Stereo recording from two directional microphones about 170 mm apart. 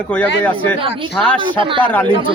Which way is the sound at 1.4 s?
30° right (ahead or behind).